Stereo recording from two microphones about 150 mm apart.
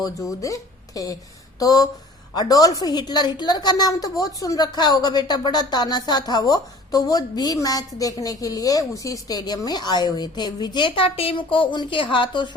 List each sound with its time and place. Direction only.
0.0 s a woman's voice: 20° left (ahead or behind)